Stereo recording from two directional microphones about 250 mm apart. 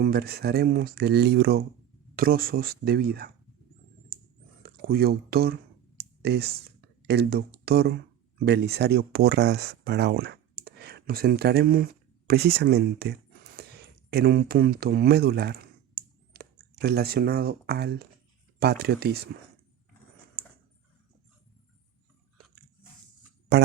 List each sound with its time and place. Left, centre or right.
0.0 s speech: right
4.6 s speech: right
13.6 s a sound: right
18.6 s speech: right
23.5 s speech: right